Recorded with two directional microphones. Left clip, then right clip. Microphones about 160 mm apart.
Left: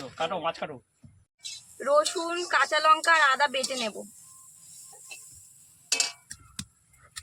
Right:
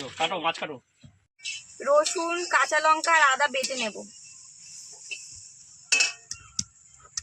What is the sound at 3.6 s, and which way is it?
Speech, 20° left (ahead or behind).